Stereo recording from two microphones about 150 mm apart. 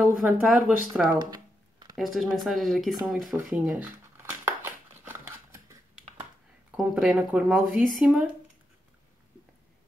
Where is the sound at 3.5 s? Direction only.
10° right (ahead or behind).